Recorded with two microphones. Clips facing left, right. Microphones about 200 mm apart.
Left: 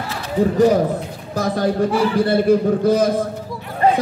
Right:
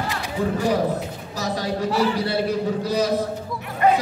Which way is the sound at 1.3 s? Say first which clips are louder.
Left 7 dB; 55° left (ahead or behind).